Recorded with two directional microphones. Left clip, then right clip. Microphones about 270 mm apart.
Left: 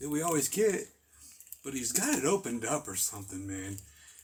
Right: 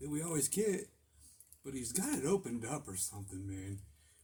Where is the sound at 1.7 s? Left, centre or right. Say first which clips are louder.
Left 8 dB; centre.